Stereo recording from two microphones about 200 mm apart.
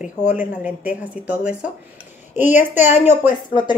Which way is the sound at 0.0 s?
5° right (ahead or behind).